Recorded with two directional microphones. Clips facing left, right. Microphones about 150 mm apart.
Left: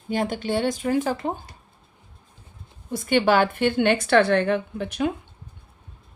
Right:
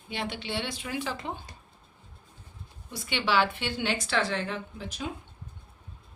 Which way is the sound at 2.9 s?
50° left (ahead or behind).